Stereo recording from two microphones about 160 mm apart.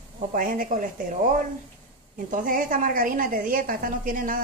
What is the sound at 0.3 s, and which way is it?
Speech, 60° right (ahead or behind).